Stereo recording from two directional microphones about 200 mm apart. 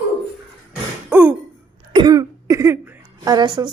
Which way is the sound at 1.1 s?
5° right (ahead or behind).